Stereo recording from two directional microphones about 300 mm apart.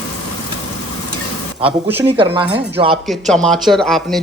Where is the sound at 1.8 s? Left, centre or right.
Centre.